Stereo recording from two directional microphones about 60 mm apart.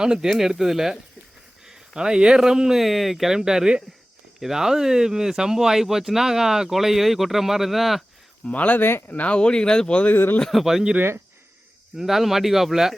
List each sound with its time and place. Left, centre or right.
0.0 s speech: centre
8.4 s speech: left
9.0 s speech: left
10.0 s speech: left
10.5 s speech: centre
11.9 s speech: centre